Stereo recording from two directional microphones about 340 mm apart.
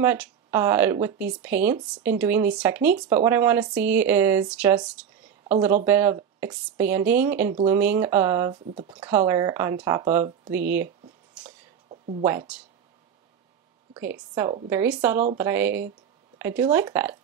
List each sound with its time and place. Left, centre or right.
0.0 s speech: centre
11.9 s a sound: centre
12.3 s speech: centre
14.3 s speech: centre